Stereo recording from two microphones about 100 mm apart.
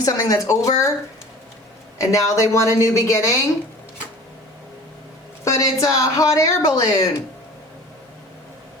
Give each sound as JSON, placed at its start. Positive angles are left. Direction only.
{"t": 0.0, "sound": "speech", "side_deg": 35}
{"t": 2.0, "sound": "speech", "side_deg": 30}
{"t": 5.5, "sound": "speech", "side_deg": 35}